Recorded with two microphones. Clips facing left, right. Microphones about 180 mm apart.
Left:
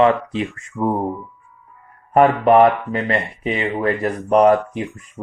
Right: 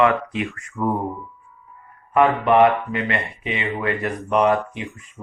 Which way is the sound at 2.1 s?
40° left (ahead or behind).